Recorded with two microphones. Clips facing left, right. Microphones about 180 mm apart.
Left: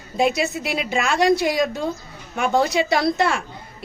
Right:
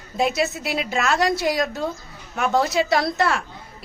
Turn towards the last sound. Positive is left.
turn(degrees=0)  # may be behind; listen again after turning